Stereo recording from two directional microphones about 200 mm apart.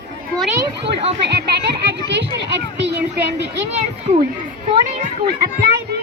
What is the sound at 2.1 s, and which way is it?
Speech, 60° right (ahead or behind).